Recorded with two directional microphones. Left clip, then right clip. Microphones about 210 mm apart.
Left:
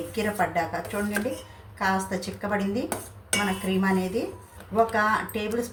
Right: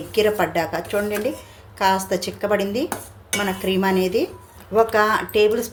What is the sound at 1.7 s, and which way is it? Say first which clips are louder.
A woman's voice: right 7 dB; 50° right (ahead or behind).